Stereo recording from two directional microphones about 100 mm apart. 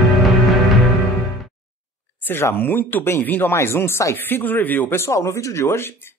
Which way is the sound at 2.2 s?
20° left (ahead or behind).